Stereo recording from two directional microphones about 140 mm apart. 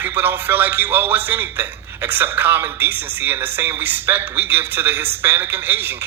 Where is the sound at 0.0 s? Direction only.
15° right (ahead or behind).